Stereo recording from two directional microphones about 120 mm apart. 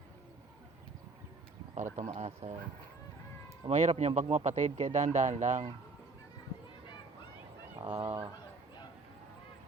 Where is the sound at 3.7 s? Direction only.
65° right (ahead or behind); by 5.6 s 90° right.